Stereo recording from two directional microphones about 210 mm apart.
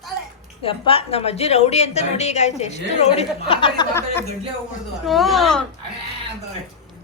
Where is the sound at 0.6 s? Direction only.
25° left (ahead or behind).